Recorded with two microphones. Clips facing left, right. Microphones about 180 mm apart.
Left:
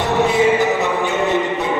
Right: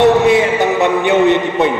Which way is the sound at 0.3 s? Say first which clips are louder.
Right 3 dB; 65° right (ahead or behind).